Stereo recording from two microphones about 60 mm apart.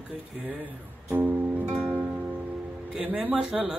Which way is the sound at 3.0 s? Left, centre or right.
Right.